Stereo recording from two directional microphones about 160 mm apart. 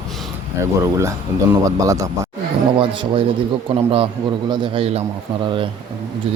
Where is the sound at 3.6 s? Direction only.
35° right (ahead or behind).